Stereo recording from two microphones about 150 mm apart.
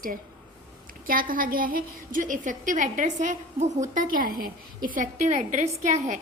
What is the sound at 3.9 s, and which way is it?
A woman's voice, 65° right (ahead or behind).